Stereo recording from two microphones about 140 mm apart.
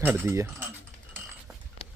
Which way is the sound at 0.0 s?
15° right (ahead or behind).